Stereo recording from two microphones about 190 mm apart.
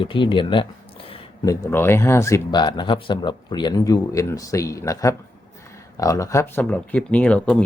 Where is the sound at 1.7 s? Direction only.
10° left (ahead or behind).